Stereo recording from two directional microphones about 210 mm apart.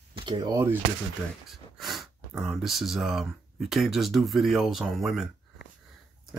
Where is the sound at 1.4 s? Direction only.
Centre (ahead or behind).